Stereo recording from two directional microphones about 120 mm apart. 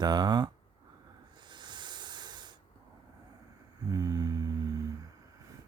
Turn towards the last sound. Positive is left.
turn(degrees=-30)  # may be behind; listen again after turning